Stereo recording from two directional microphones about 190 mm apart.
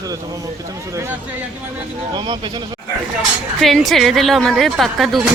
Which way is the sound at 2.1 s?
25° right (ahead or behind).